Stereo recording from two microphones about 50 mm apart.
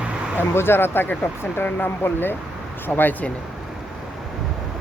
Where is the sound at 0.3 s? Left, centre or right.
Left.